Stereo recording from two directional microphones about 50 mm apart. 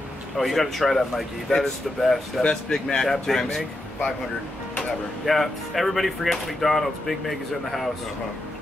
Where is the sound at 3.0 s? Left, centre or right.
Centre.